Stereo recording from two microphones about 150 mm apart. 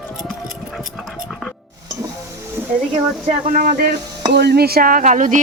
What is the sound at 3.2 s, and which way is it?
Speech, 50° right (ahead or behind).